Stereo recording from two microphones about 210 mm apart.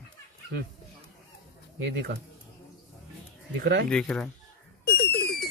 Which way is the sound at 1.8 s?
50° right (ahead or behind).